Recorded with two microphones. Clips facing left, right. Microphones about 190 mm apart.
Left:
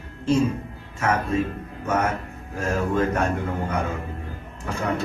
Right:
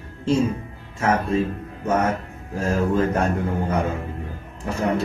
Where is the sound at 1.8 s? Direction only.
30° right (ahead or behind).